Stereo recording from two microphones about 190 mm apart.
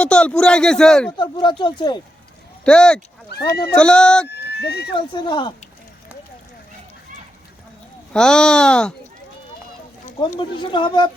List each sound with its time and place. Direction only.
0.0 s a man's voice: 5° left (ahead or behind)
1.1 s speech: 25° left (ahead or behind)
2.6 s a man's voice: 5° left (ahead or behind)
4.3 s speech: 60° left (ahead or behind)
4.9 s speech: 25° left (ahead or behind)
8.1 s a man's voice: 5° left (ahead or behind)
10.2 s speech: 25° left (ahead or behind)